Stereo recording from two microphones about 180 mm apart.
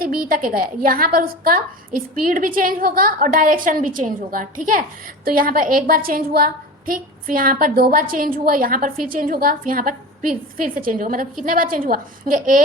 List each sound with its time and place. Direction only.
0.2 s a woman's voice: 50° right (ahead or behind)